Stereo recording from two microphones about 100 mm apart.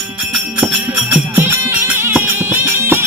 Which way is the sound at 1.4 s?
25° right (ahead or behind).